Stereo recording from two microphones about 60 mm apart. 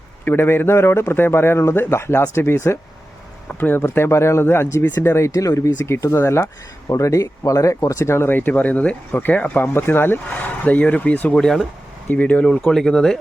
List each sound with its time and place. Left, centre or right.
0.3 s a man's voice: left
3.5 s speech: left
3.9 s a man's voice: left
5.3 s speech: left
11.3 s speech: centre
12.0 s speech: left
12.5 s speech: centre